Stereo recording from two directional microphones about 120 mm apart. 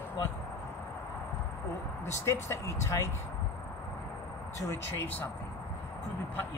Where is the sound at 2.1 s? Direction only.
25° left (ahead or behind).